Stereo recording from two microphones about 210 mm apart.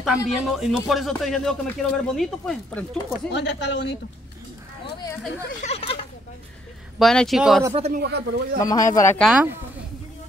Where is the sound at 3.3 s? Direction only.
55° left (ahead or behind).